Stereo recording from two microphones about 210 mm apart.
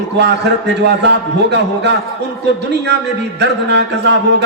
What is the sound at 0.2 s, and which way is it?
A man's voice, 55° right (ahead or behind).